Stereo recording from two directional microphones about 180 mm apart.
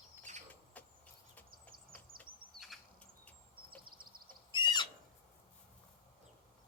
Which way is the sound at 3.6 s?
55° right (ahead or behind).